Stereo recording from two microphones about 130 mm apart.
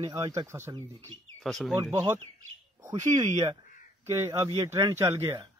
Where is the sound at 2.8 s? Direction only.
25° right (ahead or behind).